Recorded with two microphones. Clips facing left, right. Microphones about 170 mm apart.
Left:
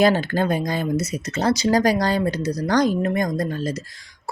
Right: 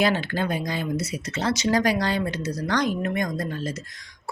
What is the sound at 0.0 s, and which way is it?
Speech, 40° left (ahead or behind).